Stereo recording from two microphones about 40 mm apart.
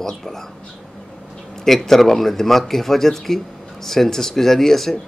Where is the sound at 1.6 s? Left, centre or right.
Centre.